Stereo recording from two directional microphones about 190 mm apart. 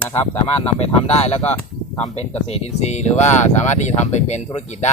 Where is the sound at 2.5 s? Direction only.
35° left (ahead or behind).